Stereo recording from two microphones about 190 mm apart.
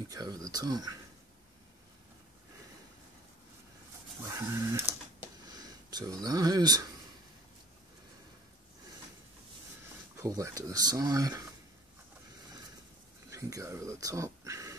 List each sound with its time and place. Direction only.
0.1 s speech: 20° right (ahead or behind)
4.3 s speech: 15° right (ahead or behind)
10.1 s speech: 15° right (ahead or behind)
13.3 s speech: 15° right (ahead or behind)